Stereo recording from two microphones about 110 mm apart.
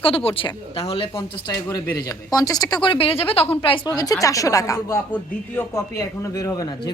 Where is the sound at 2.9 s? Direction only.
60° left (ahead or behind).